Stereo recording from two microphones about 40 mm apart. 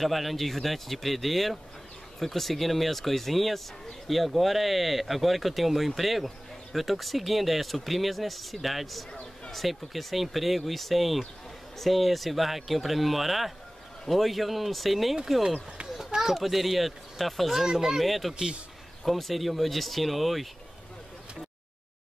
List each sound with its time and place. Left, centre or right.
0.0 s speech: centre
16.3 s speech: centre
17.7 s speech: centre
18.0 s speech: centre
18.3 s speech: centre
19.0 s speech: centre